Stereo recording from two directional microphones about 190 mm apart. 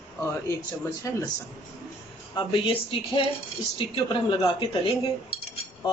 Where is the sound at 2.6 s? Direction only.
25° left (ahead or behind).